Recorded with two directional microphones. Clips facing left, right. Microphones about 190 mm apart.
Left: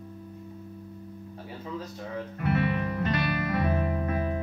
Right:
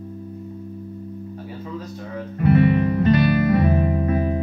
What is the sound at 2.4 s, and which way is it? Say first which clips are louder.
Music: right 11 dB; 20° right (ahead or behind).